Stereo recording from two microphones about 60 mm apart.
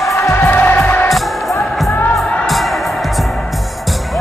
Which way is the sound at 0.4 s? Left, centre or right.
Left.